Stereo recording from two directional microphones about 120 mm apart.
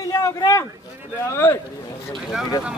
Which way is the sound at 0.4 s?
30° left (ahead or behind).